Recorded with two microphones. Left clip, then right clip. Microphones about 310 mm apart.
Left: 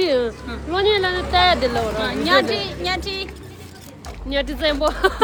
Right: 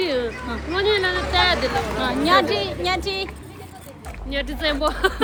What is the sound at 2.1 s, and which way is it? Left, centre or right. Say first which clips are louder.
Speech: right 1 dB; centre.